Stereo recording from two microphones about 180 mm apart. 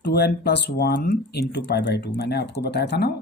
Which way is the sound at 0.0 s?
65° left (ahead or behind).